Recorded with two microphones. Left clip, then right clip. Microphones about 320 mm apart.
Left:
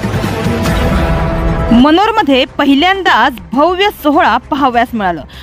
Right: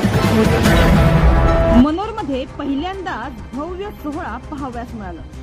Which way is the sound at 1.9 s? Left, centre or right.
Left.